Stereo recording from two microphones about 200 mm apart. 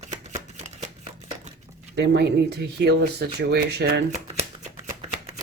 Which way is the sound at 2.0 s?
55° right (ahead or behind).